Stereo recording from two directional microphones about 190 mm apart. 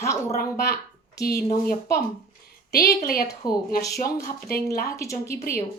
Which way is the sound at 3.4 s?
20° left (ahead or behind).